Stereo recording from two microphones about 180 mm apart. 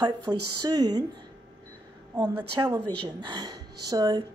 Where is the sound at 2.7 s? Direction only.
25° right (ahead or behind).